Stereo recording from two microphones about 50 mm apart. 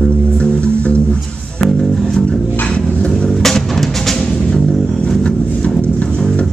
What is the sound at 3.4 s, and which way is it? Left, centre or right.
Music, centre.